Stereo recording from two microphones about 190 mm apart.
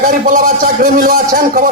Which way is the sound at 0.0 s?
45° right (ahead or behind).